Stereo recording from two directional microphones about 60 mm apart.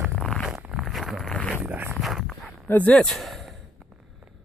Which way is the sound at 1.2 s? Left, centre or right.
Centre.